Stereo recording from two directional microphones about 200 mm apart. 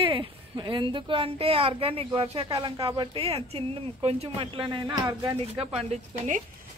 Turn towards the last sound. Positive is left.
turn(degrees=-35)  # may be behind; listen again after turning